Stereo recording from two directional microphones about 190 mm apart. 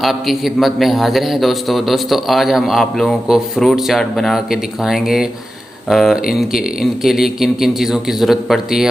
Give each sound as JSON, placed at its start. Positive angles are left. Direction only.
{"t": 0.0, "sound": "a man's voice", "side_deg": 0}